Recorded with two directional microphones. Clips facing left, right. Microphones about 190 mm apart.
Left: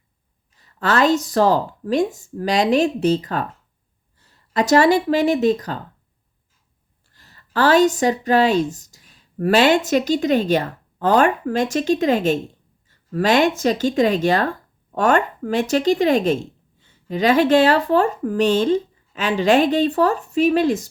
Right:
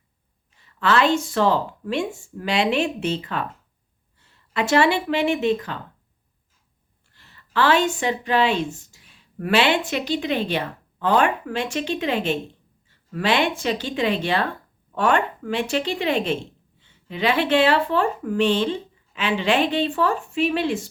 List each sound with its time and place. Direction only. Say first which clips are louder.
0.6 s speech: left 2 dB; 40° left (ahead or behind)
7.1 s speech: left 2 dB; 40° left (ahead or behind)